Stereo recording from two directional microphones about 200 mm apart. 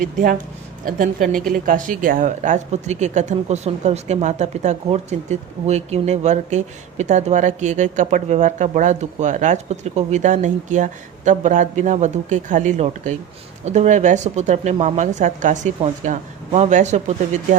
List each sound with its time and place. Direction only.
0.0 s speech: 45° right (ahead or behind)